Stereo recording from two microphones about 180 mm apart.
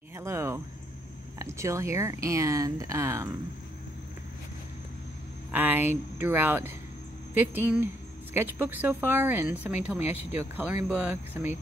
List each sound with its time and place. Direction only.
0.1 s a sound: 15° right (ahead or behind)
1.4 s a woman's voice: 15° right (ahead or behind)
5.5 s a woman's voice: 10° right (ahead or behind)